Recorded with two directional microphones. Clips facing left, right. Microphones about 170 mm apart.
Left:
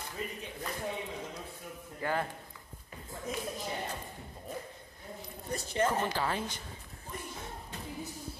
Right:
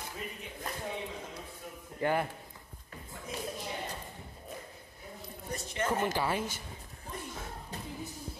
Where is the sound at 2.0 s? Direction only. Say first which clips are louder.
Right 4 dB; 20° right (ahead or behind).